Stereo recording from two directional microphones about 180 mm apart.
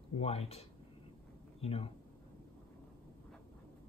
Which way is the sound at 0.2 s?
35° left (ahead or behind).